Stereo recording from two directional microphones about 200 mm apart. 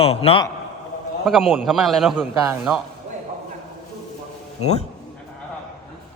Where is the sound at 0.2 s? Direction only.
30° left (ahead or behind).